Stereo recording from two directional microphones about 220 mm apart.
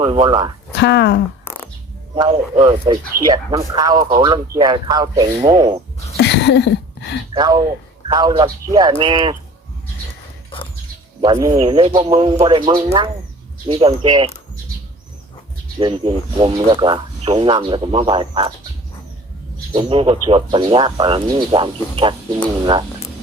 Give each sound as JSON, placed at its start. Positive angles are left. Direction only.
{"t": 0.0, "sound": "speech", "side_deg": -25}
{"t": 0.8, "sound": "speech", "side_deg": 50}
{"t": 2.1, "sound": "speech", "side_deg": -20}
{"t": 6.1, "sound": "a sound", "side_deg": 50}
{"t": 7.3, "sound": "a man's voice", "side_deg": -20}
{"t": 11.2, "sound": "speech", "side_deg": -15}
{"t": 15.8, "sound": "speech", "side_deg": -25}
{"t": 19.7, "sound": "speech", "side_deg": -25}